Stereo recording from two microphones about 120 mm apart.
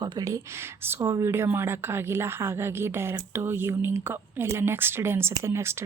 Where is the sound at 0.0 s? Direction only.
35° right (ahead or behind).